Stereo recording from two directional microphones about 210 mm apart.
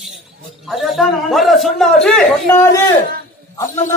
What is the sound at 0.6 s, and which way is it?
A man's voice, centre (ahead or behind).